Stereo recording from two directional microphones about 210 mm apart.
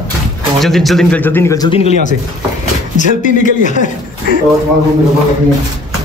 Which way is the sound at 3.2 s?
35° left (ahead or behind).